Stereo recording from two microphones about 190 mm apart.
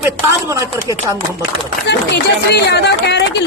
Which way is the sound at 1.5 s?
60° left (ahead or behind).